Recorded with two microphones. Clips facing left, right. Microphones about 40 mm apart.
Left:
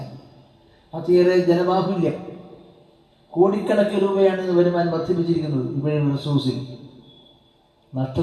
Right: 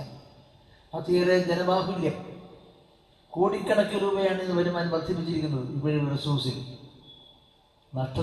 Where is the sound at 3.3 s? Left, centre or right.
Centre.